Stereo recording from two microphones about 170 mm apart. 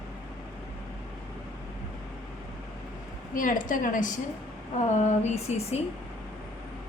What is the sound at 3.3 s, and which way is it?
A woman's voice, 55° left (ahead or behind).